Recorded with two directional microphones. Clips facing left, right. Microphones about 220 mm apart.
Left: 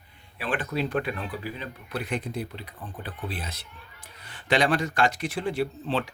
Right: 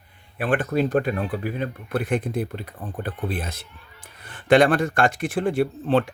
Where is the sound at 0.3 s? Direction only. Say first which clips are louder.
Right 7 dB; 50° right (ahead or behind).